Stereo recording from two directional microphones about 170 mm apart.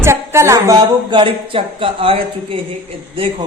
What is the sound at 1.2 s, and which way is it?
Speech, 30° right (ahead or behind).